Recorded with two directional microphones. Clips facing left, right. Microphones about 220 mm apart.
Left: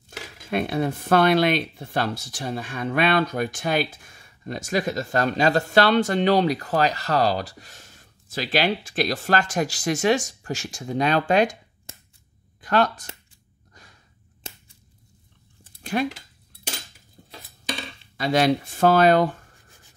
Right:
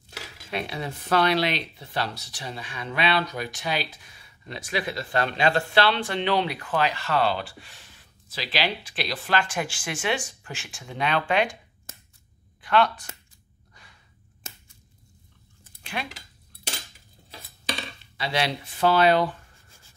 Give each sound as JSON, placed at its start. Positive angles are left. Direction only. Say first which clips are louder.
{"t": 0.5, "sound": "speech", "louder": "left 8 dB", "side_deg": 50}
{"t": 12.6, "sound": "speech", "louder": "left 1 dB", "side_deg": 40}
{"t": 15.8, "sound": "a sound", "louder": "left 10 dB", "side_deg": 45}
{"t": 18.1, "sound": "speech", "louder": "left 8 dB", "side_deg": 45}